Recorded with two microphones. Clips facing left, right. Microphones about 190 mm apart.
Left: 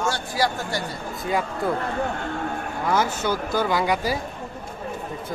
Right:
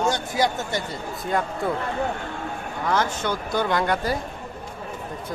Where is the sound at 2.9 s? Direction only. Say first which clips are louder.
Left 1 dB; 10° left (ahead or behind).